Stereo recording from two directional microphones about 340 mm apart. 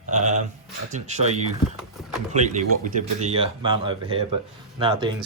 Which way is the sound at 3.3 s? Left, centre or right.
Centre.